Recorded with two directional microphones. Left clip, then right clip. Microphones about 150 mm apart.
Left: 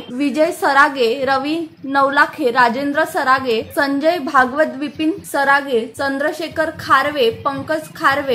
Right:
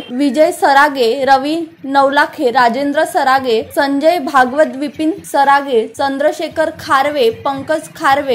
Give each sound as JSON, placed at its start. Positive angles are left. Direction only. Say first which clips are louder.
{"t": 0.2, "sound": "a woman's voice", "louder": "right 5 dB", "side_deg": -30}